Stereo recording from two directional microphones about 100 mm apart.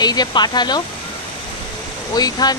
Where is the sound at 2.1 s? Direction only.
40° left (ahead or behind).